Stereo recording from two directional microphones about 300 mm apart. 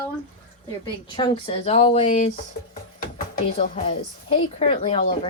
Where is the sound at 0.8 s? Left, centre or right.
Centre.